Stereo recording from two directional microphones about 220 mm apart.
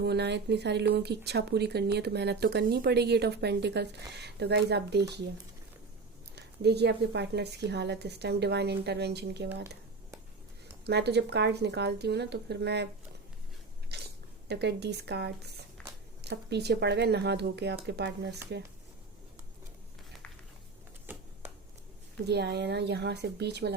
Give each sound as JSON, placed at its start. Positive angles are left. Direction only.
{"t": 0.0, "sound": "a woman's voice", "side_deg": -50}
{"t": 6.3, "sound": "a woman's voice", "side_deg": -50}
{"t": 10.8, "sound": "a woman's voice", "side_deg": -50}
{"t": 13.9, "sound": "chewing", "side_deg": -50}
{"t": 14.4, "sound": "a woman's voice", "side_deg": -50}
{"t": 22.3, "sound": "a woman's voice", "side_deg": -50}